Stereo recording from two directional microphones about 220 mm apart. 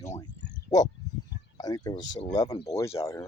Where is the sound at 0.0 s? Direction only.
15° left (ahead or behind).